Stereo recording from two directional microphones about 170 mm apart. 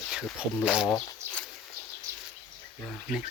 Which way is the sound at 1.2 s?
15° right (ahead or behind).